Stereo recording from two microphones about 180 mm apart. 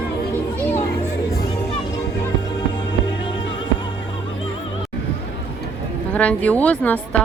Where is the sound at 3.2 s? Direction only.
25° left (ahead or behind).